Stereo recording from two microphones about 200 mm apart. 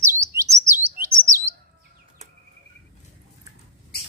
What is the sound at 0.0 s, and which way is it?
Chirp, 15° right (ahead or behind).